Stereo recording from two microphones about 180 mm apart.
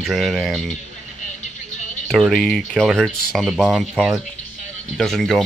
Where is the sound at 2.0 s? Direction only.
Centre (ahead or behind).